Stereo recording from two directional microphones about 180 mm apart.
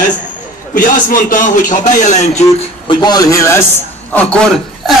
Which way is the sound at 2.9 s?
25° left (ahead or behind).